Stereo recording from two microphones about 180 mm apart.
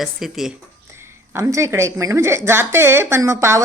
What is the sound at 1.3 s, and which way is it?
A woman's voice, 15° right (ahead or behind).